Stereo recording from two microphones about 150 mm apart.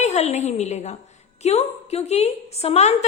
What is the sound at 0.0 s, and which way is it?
A woman's voice, 50° left (ahead or behind).